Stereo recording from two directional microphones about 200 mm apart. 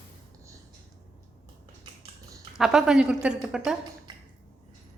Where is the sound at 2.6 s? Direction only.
Centre (ahead or behind).